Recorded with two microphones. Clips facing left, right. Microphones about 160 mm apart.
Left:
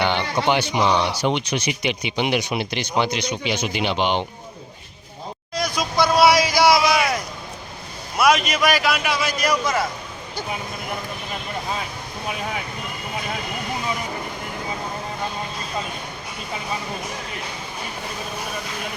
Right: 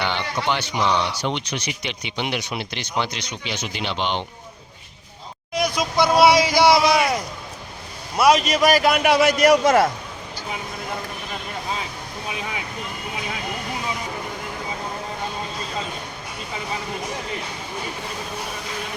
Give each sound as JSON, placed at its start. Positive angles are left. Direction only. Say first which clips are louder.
{"t": 0.5, "sound": "speech", "louder": "left 2 dB", "side_deg": 15}
{"t": 5.5, "sound": "speech", "louder": "right 1 dB", "side_deg": -25}
{"t": 8.2, "sound": "a man's voice", "louder": "right 2 dB", "side_deg": -35}